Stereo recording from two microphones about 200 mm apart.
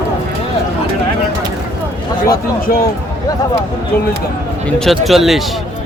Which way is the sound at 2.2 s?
45° left (ahead or behind).